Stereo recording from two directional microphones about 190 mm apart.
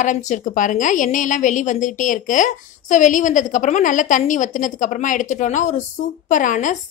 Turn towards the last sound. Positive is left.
turn(degrees=40)  # may be behind; listen again after turning